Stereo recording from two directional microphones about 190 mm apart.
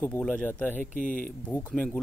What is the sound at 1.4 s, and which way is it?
Speech, 5° left (ahead or behind).